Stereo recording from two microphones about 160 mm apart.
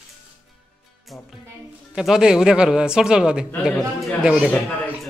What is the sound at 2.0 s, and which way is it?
A man's voice, 5° right (ahead or behind).